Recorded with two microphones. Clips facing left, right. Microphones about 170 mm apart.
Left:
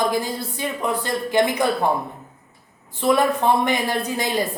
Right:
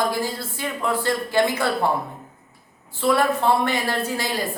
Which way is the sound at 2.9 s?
20° left (ahead or behind).